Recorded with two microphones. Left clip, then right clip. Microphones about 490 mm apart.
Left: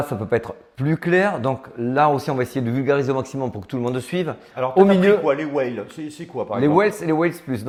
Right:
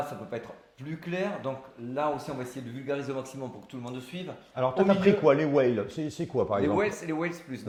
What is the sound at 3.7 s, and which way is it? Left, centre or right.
Speech, left.